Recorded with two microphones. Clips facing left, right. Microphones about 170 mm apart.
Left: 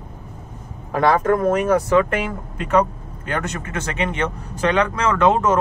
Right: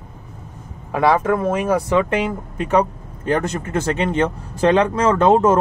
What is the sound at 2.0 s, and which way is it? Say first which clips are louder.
Speech: right 1 dB; 25° right (ahead or behind).